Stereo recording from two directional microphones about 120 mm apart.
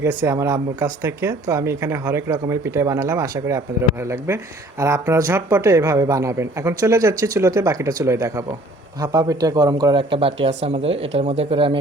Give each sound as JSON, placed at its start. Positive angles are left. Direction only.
{"t": 0.0, "sound": "speech", "side_deg": -20}